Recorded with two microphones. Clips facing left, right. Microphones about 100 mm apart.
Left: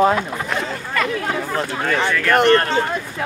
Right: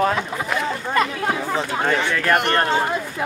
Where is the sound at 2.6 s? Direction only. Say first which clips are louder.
Even; 15° right (ahead or behind).